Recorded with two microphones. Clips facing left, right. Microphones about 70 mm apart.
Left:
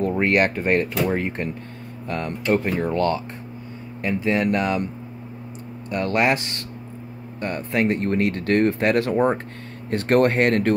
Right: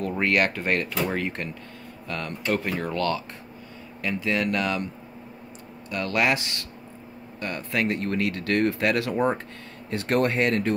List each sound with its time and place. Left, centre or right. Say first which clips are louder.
0.0 s speech: left 4 dB; left
5.9 s speech: left 4 dB; left
9.8 s speech: left 5 dB; left